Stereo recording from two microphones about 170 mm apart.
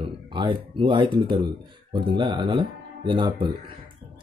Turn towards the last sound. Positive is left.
turn(degrees=-30)  # may be behind; listen again after turning